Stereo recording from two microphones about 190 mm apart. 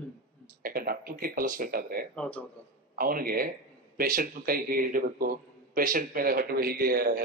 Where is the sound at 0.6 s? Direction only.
50° right (ahead or behind).